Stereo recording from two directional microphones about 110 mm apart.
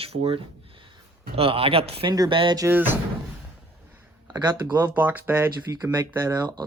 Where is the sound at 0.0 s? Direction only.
65° right (ahead or behind).